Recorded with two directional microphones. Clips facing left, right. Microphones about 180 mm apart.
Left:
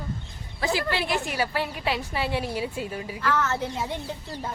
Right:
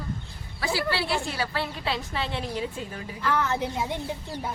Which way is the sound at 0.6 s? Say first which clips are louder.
Left 1 dB; 20° left (ahead or behind).